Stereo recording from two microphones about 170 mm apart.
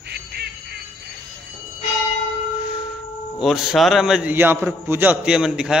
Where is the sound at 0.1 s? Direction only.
75° right (ahead or behind).